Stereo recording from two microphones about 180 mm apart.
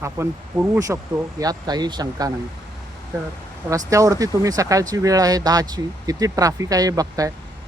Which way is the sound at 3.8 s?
20° right (ahead or behind).